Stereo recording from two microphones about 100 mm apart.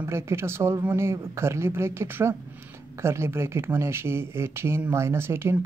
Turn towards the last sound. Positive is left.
turn(degrees=-25)  # may be behind; listen again after turning